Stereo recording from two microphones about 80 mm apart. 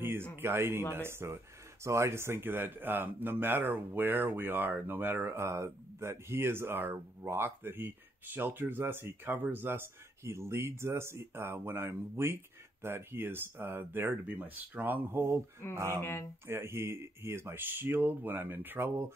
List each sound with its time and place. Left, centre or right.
0.0 s speech: right
16.0 s speech: left
16.4 s speech: right